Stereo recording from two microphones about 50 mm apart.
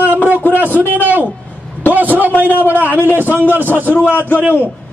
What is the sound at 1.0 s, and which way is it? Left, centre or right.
A man's voice, right.